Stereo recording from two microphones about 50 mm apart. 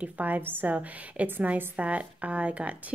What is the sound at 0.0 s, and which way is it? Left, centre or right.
A woman's voice, right.